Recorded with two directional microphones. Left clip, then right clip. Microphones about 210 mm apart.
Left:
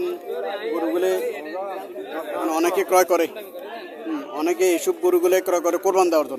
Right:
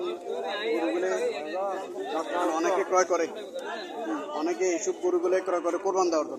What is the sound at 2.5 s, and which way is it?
Speech, 55° left (ahead or behind).